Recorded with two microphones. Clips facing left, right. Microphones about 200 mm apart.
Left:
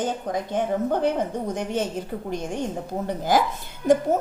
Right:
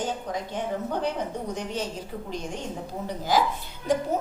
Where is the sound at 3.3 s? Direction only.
50° left (ahead or behind).